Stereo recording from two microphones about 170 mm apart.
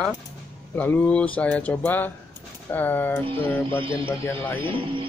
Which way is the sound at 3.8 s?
30° right (ahead or behind).